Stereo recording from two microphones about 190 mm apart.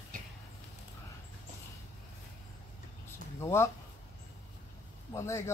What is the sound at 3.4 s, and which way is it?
Speech, 15° left (ahead or behind).